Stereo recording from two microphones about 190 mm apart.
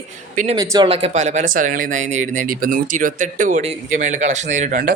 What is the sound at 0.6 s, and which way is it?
Speech, 25° right (ahead or behind).